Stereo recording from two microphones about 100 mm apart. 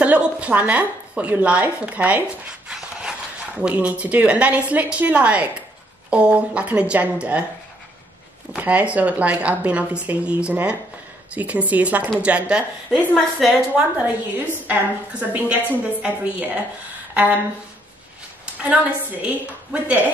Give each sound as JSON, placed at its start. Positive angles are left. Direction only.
{"t": 0.0, "sound": "speech", "side_deg": -10}
{"t": 8.5, "sound": "speech", "side_deg": -15}
{"t": 12.9, "sound": "a woman's voice", "side_deg": 10}
{"t": 13.7, "sound": "speech", "side_deg": -10}
{"t": 18.6, "sound": "speech", "side_deg": -15}